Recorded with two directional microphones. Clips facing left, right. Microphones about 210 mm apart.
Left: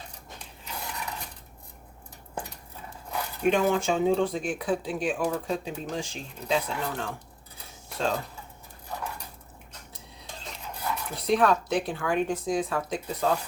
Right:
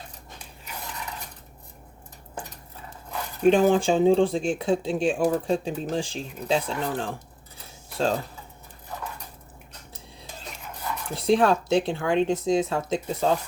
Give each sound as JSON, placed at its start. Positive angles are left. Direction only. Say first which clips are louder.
{"t": 3.4, "sound": "speech", "louder": "right 5 dB", "side_deg": -30}
{"t": 11.1, "sound": "speech", "louder": "right 3 dB", "side_deg": -30}